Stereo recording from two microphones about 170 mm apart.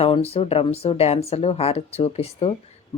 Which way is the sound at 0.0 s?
35° left (ahead or behind).